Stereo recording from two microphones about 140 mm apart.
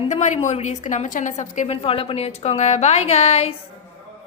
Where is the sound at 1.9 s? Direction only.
40° left (ahead or behind).